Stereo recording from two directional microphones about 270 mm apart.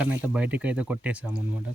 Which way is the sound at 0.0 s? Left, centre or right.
Centre.